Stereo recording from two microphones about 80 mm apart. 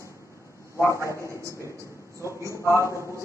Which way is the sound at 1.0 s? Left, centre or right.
Left.